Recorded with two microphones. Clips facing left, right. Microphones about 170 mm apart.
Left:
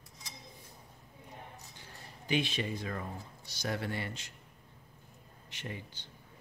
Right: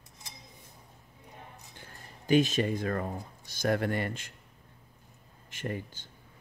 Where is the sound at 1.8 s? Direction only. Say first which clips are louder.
Right 1 dB; 45° right (ahead or behind).